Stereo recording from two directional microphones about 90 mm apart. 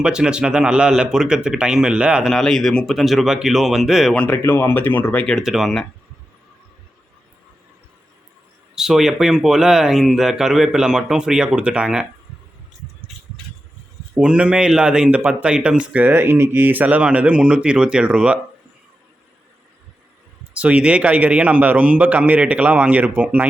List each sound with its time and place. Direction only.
0.0 s speech: 10° right (ahead or behind)
2.3 s speech: 5° left (ahead or behind)
4.1 s speech: 15° left (ahead or behind)
4.4 s speech: 25° left (ahead or behind)
5.4 s speech: 5° right (ahead or behind)
8.7 s speech: 5° right (ahead or behind)
14.2 s speech: 15° right (ahead or behind)
20.6 s speech: 15° right (ahead or behind)